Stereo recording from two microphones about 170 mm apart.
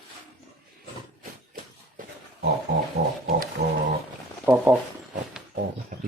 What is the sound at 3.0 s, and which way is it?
Pig, 90° right.